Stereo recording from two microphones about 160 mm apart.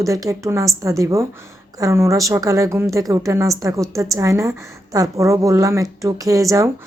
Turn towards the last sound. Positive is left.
turn(degrees=-20)  # may be behind; listen again after turning